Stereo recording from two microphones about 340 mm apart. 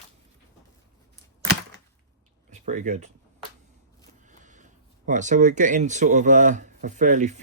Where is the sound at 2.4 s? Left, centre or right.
Right.